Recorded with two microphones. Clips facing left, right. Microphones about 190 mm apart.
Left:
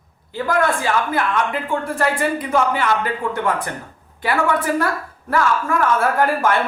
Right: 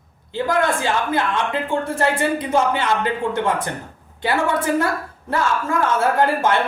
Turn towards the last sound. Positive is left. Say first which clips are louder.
# even
turn(degrees=-25)  # may be behind; listen again after turning